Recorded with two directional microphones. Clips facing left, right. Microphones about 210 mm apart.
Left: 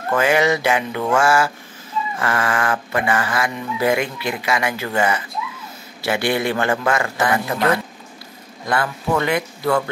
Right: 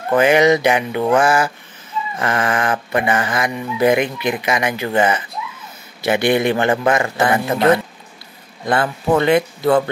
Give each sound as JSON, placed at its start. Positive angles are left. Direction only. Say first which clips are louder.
{"t": 0.1, "sound": "speech", "louder": "right 5 dB", "side_deg": -20}